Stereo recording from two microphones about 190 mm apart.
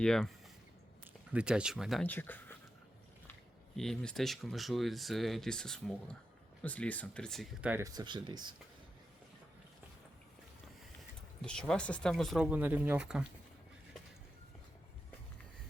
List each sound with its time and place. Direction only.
0.0 s speech: centre (ahead or behind)
2.0 s speech: 10° left (ahead or behind)
3.8 s speech: centre (ahead or behind)
7.7 s speech: 15° right (ahead or behind)
11.4 s speech: 5° left (ahead or behind)